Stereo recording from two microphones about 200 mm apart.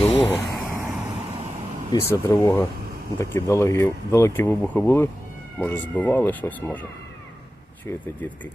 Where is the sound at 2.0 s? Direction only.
15° left (ahead or behind).